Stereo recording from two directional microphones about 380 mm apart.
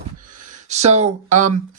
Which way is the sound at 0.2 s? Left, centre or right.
Right.